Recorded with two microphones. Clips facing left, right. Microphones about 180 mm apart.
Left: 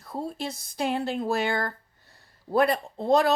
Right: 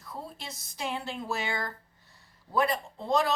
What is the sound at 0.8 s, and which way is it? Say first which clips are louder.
A woman's voice: left 8 dB; 55° left (ahead or behind).